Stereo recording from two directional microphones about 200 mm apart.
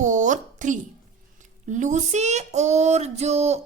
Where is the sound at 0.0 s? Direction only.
40° right (ahead or behind).